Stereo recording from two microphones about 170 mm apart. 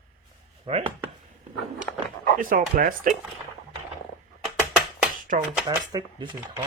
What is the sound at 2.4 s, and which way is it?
Speech, 55° right (ahead or behind).